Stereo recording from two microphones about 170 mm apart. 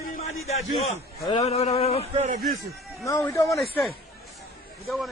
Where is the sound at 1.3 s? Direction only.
40° left (ahead or behind).